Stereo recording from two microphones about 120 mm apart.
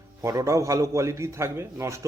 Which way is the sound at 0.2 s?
25° right (ahead or behind).